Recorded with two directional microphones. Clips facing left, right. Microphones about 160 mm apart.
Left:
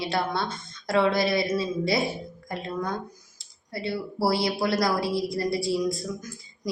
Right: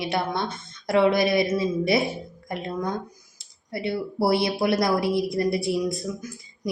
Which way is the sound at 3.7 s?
20° right (ahead or behind).